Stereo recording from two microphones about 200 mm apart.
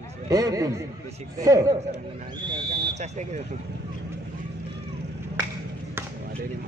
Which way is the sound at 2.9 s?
35° right (ahead or behind).